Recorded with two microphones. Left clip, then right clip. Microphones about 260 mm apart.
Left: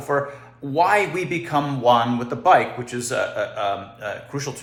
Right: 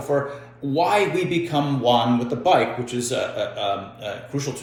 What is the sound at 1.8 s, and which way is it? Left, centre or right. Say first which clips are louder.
Speech: left 2 dB; centre.